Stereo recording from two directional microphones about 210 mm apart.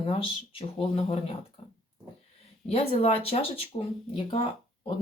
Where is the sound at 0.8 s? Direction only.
25° left (ahead or behind).